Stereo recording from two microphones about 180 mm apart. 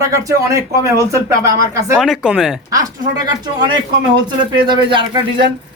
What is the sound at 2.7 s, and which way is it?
Speech, 20° right (ahead or behind).